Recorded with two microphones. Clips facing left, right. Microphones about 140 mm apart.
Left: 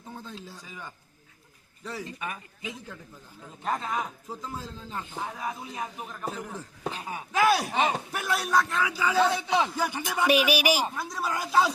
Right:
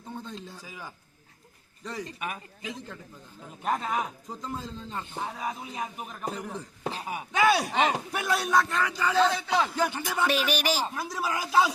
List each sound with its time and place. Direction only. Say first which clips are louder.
0.1 s a sound: right 2 dB; centre (ahead or behind)
1.8 s a man's voice: right 1 dB; centre (ahead or behind)
2.1 s speech: right 1 dB; 15° right (ahead or behind)
3.6 s speech: right 1 dB; 10° right (ahead or behind)
4.3 s a man's voice: right 1 dB; centre (ahead or behind)
5.4 s speech: even; 10° right (ahead or behind)
6.2 s a man's voice: right 1 dB; centre (ahead or behind)
10.9 s a man's voice: even; centre (ahead or behind)